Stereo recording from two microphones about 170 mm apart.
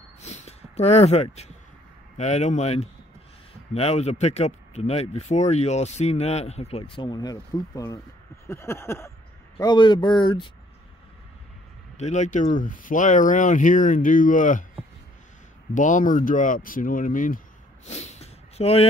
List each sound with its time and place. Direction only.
0.2 s a sound: 40° left (ahead or behind)
2.1 s speech: 40° left (ahead or behind); by 8.0 s 20° left (ahead or behind)
8.5 s a sound: 15° left (ahead or behind)
9.6 s speech: 25° left (ahead or behind)
12.0 s speech: 45° left (ahead or behind)
15.7 s speech: 45° left (ahead or behind)
17.8 s snort: 40° left (ahead or behind)